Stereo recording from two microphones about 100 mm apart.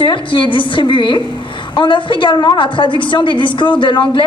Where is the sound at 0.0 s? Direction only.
55° left (ahead or behind).